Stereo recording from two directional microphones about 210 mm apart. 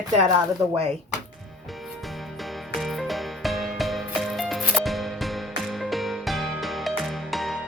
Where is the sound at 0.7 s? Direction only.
30° right (ahead or behind).